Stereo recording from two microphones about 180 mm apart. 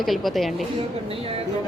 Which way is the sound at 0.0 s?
Centre (ahead or behind).